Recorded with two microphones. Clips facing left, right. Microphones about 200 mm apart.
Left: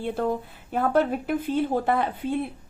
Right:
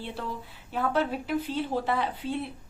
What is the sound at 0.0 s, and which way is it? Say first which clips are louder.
A woman's voice: left 9 dB; 50° left (ahead or behind).